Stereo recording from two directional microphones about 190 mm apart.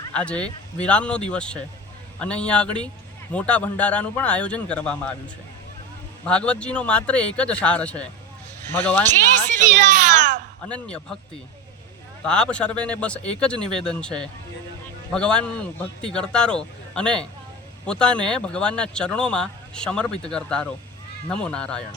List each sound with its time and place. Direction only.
0.1 s speech: 5° left (ahead or behind)
6.2 s speech: 5° left (ahead or behind)
9.6 s a child's voice: 40° right (ahead or behind)
10.7 s speech: 5° left (ahead or behind)
12.2 s speech: 5° left (ahead or behind)